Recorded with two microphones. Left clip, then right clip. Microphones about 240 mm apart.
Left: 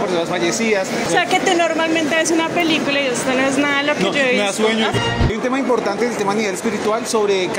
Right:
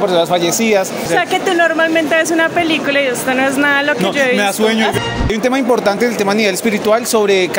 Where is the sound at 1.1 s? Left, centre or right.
Right.